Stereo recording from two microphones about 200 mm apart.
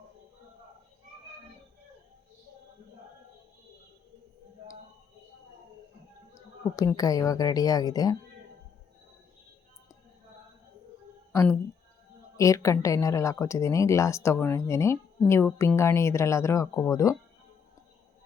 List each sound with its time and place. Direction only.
6.3 s a woman's voice: 15° left (ahead or behind)
12.4 s speech: 15° left (ahead or behind)